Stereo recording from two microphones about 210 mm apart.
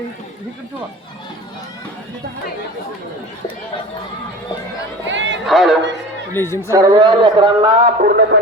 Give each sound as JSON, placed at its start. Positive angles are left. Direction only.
{"t": 5.0, "sound": "a sound", "side_deg": -60}
{"t": 5.5, "sound": "music", "side_deg": 0}
{"t": 6.3, "sound": "a woman's voice", "side_deg": 10}
{"t": 6.7, "sound": "a man's voice", "side_deg": -20}
{"t": 8.0, "sound": "a man's voice", "side_deg": -50}